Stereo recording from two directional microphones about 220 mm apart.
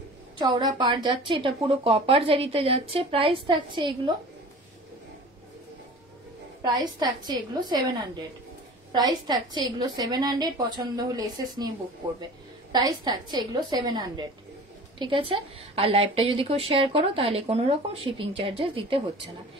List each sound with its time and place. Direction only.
0.4 s a woman's voice: 20° right (ahead or behind)
6.6 s a woman's voice: 20° right (ahead or behind)
12.7 s a woman's voice: 20° right (ahead or behind)